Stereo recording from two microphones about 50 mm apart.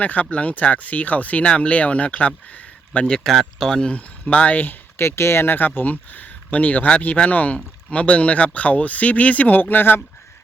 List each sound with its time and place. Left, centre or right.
0.0 s speech: left
3.1 s speech: centre
3.8 s speech: left
4.9 s speech: left
5.5 s speech: left